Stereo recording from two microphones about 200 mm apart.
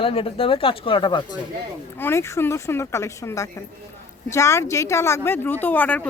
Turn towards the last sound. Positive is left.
turn(degrees=10)  # may be behind; listen again after turning